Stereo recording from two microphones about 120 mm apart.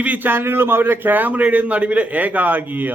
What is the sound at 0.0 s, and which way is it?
A man's voice, 15° right (ahead or behind).